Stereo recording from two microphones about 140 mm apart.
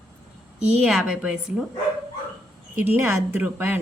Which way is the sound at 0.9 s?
5° right (ahead or behind).